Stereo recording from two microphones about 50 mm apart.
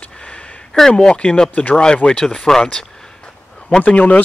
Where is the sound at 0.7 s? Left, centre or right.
Centre.